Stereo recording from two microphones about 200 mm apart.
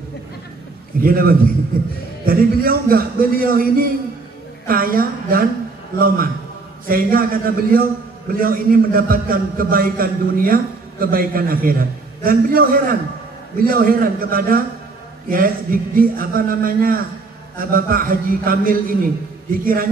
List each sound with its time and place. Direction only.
1.0 s a man's voice: 45° right (ahead or behind)